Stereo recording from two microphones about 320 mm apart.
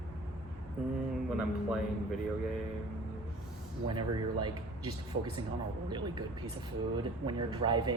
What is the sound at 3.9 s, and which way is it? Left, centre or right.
Speech, centre.